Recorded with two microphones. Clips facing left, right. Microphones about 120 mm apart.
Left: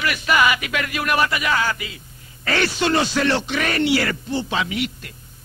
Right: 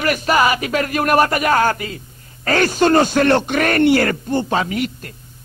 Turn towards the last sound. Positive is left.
turn(degrees=-45)  # may be behind; listen again after turning